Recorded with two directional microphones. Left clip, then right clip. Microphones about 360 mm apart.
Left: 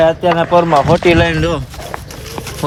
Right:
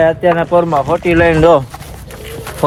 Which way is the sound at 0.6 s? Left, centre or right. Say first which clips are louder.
Left 3 dB; left.